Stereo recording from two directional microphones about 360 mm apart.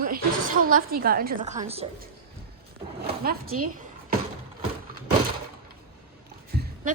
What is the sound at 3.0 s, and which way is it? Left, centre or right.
Drawer open or close, right.